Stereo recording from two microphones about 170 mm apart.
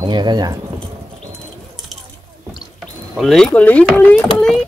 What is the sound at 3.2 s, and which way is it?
Speech, centre (ahead or behind).